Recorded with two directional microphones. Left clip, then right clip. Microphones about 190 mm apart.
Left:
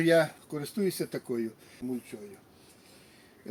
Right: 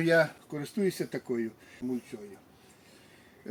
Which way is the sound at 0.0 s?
5° left (ahead or behind).